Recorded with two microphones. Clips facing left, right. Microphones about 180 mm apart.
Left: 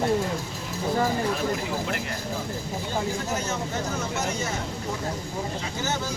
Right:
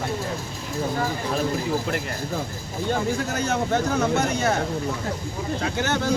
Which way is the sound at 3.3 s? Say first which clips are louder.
Right 6 dB; 65° right (ahead or behind).